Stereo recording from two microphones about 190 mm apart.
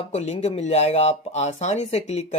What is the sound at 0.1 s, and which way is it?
Speech, 35° left (ahead or behind).